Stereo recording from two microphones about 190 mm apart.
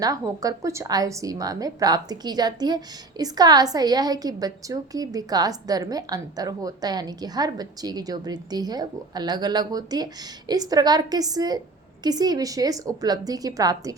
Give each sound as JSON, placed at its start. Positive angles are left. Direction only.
{"t": 0.0, "sound": "a woman's voice", "side_deg": -20}